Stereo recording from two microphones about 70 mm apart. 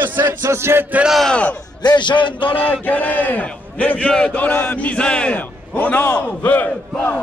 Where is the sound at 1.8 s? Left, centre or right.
Left.